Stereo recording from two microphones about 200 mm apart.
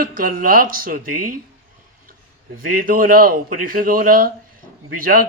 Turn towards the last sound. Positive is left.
turn(degrees=-45)  # may be behind; listen again after turning